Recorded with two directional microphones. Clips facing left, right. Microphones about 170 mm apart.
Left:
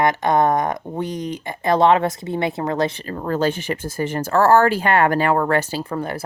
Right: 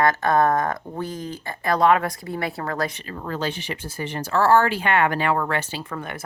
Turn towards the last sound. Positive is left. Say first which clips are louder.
# left 7 dB
turn(degrees=35)  # may be behind; listen again after turning